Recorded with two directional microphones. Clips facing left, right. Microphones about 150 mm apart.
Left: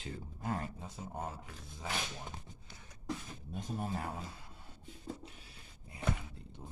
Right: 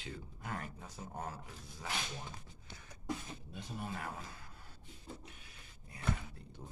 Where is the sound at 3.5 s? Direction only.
45° left (ahead or behind).